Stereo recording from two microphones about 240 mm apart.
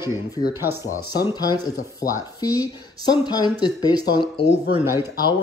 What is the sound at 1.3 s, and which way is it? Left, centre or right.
Speech, centre.